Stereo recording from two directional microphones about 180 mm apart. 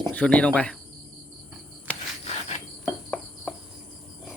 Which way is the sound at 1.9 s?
5° left (ahead or behind).